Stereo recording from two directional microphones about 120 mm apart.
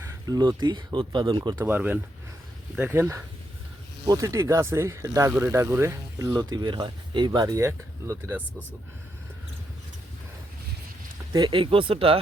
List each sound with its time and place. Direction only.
0.0 s speech: 30° right (ahead or behind)
1.5 s speech: 15° right (ahead or behind)
4.0 s speech: 30° right (ahead or behind)
11.3 s speech: 35° right (ahead or behind)